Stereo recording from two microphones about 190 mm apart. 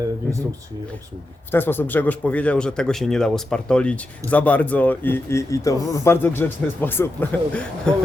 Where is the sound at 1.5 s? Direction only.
10° left (ahead or behind).